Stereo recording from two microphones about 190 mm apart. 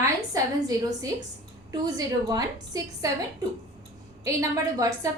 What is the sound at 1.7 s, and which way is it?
A woman's voice, 20° right (ahead or behind).